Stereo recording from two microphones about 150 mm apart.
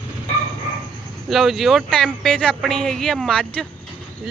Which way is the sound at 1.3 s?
Centre (ahead or behind).